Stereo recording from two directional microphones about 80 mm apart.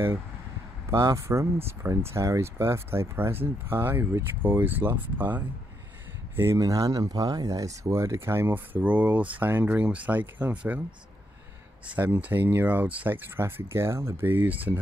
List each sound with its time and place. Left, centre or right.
0.8 s speech: right
6.3 s speech: right
6.6 s speech: right; by 10.8 s centre
11.9 s speech: right